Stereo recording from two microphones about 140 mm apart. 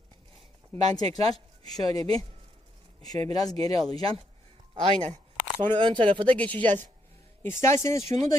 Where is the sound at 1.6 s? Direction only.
25° left (ahead or behind).